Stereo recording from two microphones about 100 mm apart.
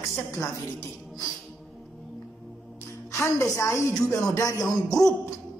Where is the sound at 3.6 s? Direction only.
30° left (ahead or behind).